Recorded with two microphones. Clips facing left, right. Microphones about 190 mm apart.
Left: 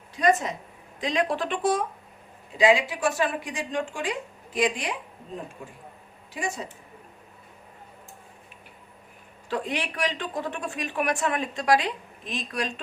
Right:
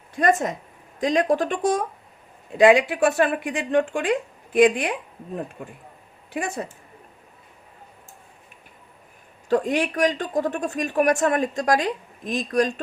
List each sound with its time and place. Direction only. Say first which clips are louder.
0.2 s a woman's voice: right 2 dB; 50° right (ahead or behind)
2.6 s a woman's voice: right 6 dB; 55° right (ahead or behind)
9.5 s a woman's voice: right 8 dB; 45° right (ahead or behind)